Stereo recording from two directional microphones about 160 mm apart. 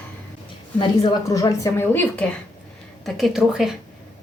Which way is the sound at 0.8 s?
25° left (ahead or behind).